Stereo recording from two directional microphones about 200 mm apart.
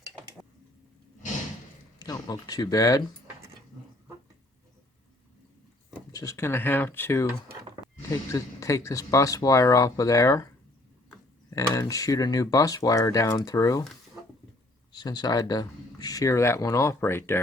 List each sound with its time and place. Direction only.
2.0 s speech: 20° left (ahead or behind)
6.1 s speech: 15° left (ahead or behind)
8.3 s speech: 15° left (ahead or behind)
11.5 s speech: 15° left (ahead or behind)
14.9 s speech: 20° left (ahead or behind)